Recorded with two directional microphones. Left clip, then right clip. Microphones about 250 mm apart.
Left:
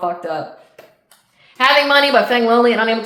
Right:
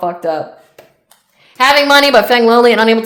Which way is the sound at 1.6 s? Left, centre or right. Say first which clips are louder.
Right 4 dB; right.